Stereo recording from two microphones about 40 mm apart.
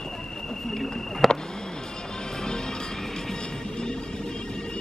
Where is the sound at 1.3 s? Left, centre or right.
Centre.